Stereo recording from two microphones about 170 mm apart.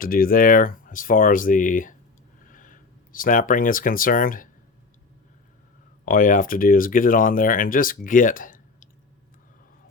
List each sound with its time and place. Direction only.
0.0 s speech: 60° left (ahead or behind)
6.1 s speech: 55° left (ahead or behind)